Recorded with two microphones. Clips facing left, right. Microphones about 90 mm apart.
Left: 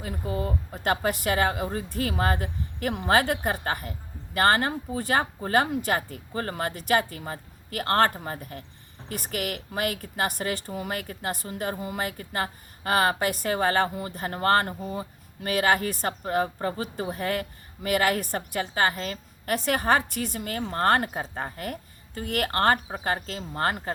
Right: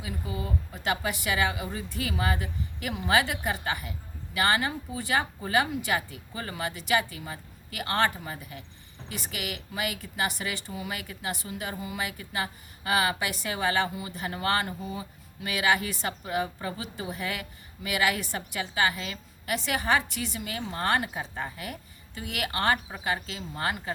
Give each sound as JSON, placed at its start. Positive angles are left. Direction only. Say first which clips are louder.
{"t": 0.0, "sound": "a woman's voice", "louder": "left 5 dB", "side_deg": 50}